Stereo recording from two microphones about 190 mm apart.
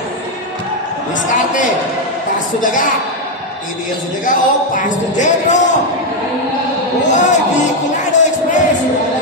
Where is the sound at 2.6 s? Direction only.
45° left (ahead or behind).